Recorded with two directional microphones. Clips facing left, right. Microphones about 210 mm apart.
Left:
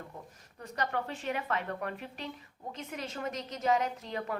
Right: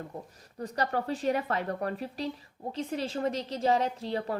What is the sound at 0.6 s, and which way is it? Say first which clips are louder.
A woman's voice: right 4 dB; 35° right (ahead or behind).